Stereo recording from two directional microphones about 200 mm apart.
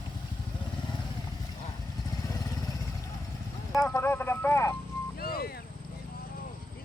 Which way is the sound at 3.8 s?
15° left (ahead or behind).